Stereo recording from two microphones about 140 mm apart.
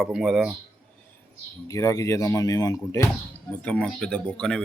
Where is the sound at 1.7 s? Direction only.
25° left (ahead or behind).